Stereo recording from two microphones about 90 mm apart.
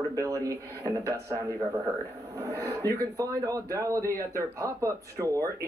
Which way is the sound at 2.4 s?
40° right (ahead or behind).